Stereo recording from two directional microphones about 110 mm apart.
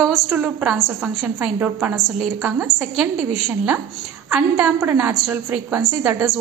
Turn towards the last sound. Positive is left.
turn(degrees=-5)  # may be behind; listen again after turning